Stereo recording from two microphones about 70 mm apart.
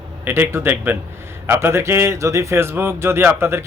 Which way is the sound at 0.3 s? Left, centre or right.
Right.